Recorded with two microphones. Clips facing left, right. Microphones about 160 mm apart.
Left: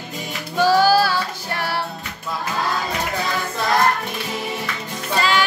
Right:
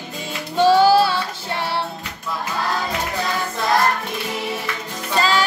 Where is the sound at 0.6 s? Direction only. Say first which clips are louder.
Right 2 dB; 25° right (ahead or behind).